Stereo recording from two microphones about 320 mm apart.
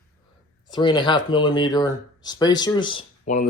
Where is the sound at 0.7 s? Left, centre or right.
Centre.